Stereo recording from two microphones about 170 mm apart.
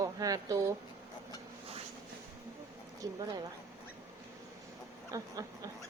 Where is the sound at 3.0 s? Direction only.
20° right (ahead or behind).